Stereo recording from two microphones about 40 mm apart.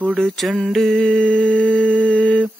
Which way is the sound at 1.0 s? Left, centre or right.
Left.